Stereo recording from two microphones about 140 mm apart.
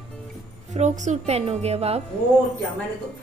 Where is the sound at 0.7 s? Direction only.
55° right (ahead or behind).